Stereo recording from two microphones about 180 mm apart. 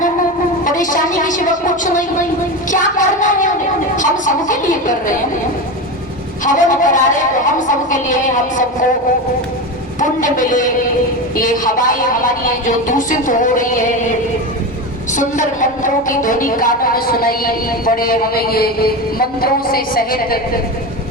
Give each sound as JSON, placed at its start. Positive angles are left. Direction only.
{"t": 0.6, "sound": "a sound", "side_deg": 45}
{"t": 2.6, "sound": "child singing", "side_deg": 45}
{"t": 3.9, "sound": "a sound", "side_deg": 45}
{"t": 6.4, "sound": "a woman's voice", "side_deg": 45}
{"t": 10.0, "sound": "a woman's voice", "side_deg": 45}
{"t": 15.1, "sound": "a woman's voice", "side_deg": 45}